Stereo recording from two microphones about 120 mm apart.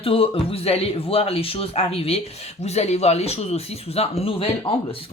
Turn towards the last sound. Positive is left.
turn(degrees=50)  # may be behind; listen again after turning